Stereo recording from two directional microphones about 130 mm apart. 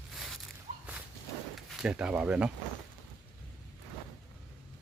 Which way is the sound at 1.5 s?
Centre (ahead or behind).